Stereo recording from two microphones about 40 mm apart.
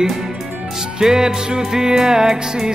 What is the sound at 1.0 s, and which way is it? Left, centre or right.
Music, centre.